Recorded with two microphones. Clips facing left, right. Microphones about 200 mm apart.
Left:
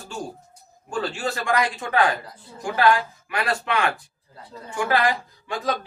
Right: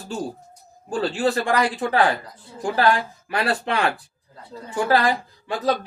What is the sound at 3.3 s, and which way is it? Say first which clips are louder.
A man's voice: right 2 dB; 35° right (ahead or behind).